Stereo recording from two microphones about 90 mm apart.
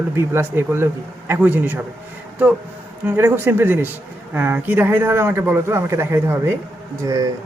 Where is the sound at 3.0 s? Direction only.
25° right (ahead or behind).